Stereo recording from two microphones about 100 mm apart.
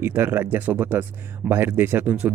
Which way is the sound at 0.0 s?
20° right (ahead or behind).